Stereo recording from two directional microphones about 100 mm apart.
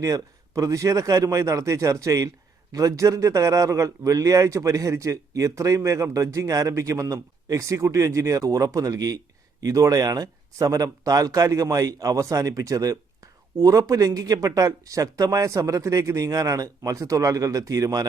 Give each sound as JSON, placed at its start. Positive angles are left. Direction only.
{"t": 0.0, "sound": "a man's voice", "side_deg": -35}